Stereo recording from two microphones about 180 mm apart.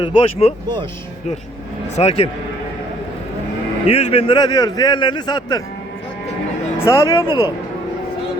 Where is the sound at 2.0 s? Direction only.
35° left (ahead or behind).